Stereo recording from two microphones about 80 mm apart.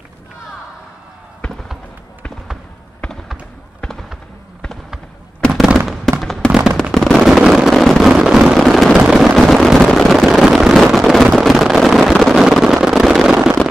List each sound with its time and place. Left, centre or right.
3.0 s basketball bounce: centre
5.5 s fireworks: centre
6.2 s fireworks: centre
8.5 s a sound: centre
8.9 s vehicle: centre
12.0 s a sound: centre